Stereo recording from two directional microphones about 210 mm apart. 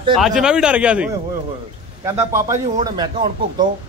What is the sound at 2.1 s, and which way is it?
Speech, 15° right (ahead or behind).